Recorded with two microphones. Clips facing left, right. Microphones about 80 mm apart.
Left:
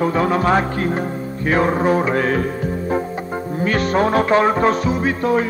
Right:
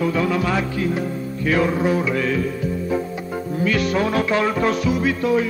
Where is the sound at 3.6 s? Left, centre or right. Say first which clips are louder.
Left 3 dB; left.